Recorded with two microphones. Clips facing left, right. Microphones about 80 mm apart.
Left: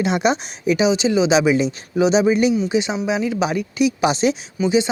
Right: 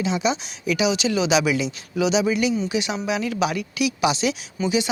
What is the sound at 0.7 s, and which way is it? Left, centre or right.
Speech, left.